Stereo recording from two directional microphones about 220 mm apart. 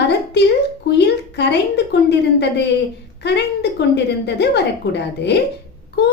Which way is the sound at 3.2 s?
50° left (ahead or behind).